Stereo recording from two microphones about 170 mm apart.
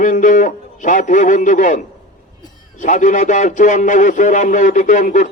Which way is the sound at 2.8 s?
50° left (ahead or behind).